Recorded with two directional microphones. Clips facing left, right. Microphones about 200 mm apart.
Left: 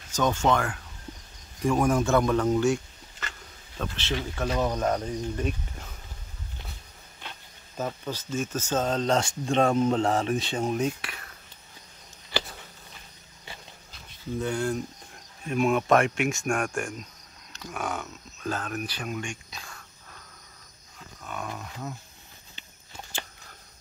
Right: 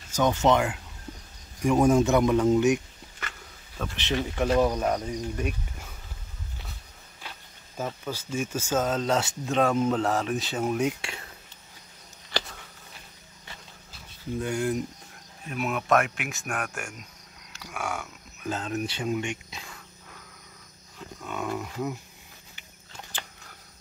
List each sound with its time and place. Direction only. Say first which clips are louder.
0.1 s a man's voice: right 2 dB; 15° right (ahead or behind)
7.2 s speech: even; 5° right (ahead or behind)
9.8 s speech: left 1 dB; 30° left (ahead or behind)
10.3 s speech: even; centre (ahead or behind)
11.0 s speech: right 2 dB; 25° right (ahead or behind)
14.4 s speech: even; 15° right (ahead or behind)
15.5 s speech: left 3 dB; 5° right (ahead or behind); by 19.8 s 20° right (ahead or behind)
21.3 s speech: right 5 dB; 20° right (ahead or behind)